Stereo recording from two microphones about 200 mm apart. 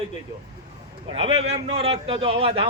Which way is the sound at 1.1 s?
30° right (ahead or behind).